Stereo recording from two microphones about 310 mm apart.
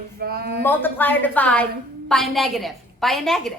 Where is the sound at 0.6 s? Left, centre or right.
Centre.